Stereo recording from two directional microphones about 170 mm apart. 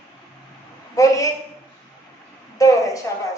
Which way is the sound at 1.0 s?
20° left (ahead or behind).